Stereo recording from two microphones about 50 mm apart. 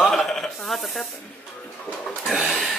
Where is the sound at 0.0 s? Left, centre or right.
Centre.